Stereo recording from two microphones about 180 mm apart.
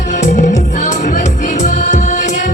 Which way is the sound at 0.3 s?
40° left (ahead or behind).